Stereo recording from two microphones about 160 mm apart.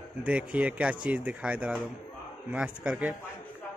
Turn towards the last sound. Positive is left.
turn(degrees=-10)  # may be behind; listen again after turning